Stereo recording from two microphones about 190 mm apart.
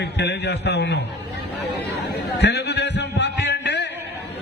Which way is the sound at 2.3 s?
65° left (ahead or behind).